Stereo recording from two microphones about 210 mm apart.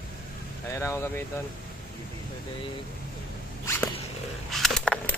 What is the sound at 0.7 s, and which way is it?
Speech, 10° left (ahead or behind).